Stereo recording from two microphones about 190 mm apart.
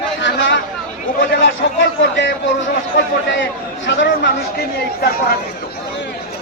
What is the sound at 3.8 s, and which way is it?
Speech, 70° left (ahead or behind).